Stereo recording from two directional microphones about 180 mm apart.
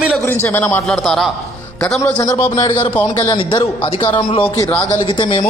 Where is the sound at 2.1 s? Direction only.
20° left (ahead or behind).